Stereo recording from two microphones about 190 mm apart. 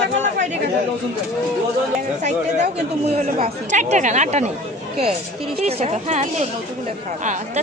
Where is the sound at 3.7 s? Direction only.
40° right (ahead or behind).